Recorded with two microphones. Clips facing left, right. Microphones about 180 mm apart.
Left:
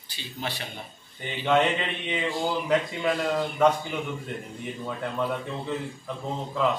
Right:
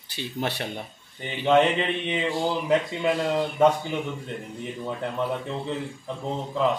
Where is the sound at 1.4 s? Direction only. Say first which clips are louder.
Right 3 dB; 20° right (ahead or behind).